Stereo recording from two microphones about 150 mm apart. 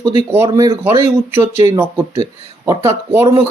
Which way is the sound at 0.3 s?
20° right (ahead or behind).